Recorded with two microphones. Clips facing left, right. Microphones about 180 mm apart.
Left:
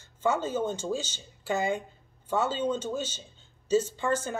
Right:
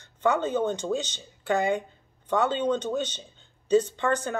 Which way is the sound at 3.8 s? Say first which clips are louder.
Right 2 dB; 60° right (ahead or behind).